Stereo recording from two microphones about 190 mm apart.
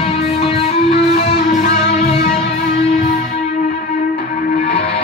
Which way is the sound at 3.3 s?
35° left (ahead or behind).